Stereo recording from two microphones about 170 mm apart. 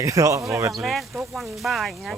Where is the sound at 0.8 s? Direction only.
Centre (ahead or behind).